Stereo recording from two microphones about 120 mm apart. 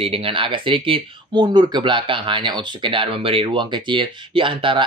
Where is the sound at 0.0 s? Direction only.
50° right (ahead or behind).